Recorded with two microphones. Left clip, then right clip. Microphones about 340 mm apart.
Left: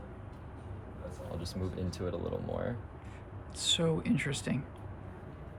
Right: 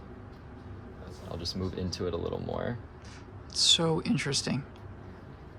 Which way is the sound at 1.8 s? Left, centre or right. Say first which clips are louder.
Right 4 dB; right.